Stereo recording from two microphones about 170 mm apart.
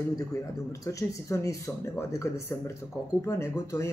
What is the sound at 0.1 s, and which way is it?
A man's voice, 20° left (ahead or behind).